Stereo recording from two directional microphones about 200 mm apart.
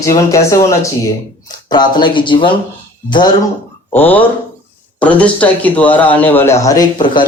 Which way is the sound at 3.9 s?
10° left (ahead or behind).